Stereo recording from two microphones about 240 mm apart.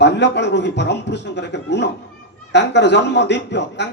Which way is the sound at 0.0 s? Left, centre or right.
Left.